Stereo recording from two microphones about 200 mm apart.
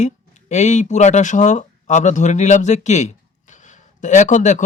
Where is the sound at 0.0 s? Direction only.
35° left (ahead or behind).